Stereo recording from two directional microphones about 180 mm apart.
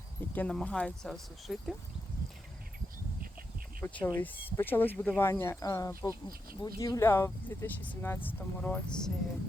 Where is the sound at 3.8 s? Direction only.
10° left (ahead or behind).